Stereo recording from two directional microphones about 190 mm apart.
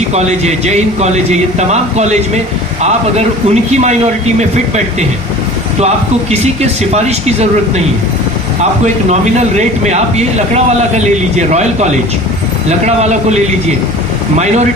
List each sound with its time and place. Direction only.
0.1 s speech: 35° right (ahead or behind)
6.9 s speech: 35° right (ahead or behind)
9.6 s speech: 35° right (ahead or behind)